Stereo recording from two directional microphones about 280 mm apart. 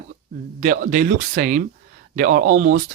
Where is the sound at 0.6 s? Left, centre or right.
Right.